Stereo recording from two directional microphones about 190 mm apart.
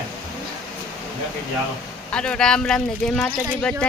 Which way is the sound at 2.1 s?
5° left (ahead or behind).